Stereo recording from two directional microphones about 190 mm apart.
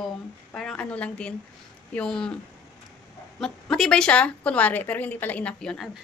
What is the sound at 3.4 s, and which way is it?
A woman's voice, centre (ahead or behind).